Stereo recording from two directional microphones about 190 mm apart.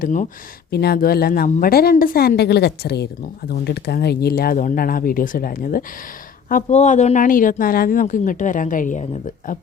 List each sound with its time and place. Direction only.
0.0 s speech: 40° left (ahead or behind)
0.7 s speech: 55° left (ahead or behind)